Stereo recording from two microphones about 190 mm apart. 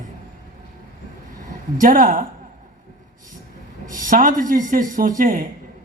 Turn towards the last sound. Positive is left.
turn(degrees=-45)  # may be behind; listen again after turning